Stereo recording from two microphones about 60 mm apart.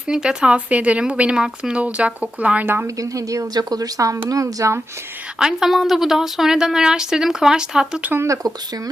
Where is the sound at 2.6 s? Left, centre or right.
Right.